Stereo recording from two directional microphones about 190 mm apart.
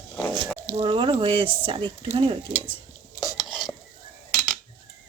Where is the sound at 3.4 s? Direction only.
Centre (ahead or behind).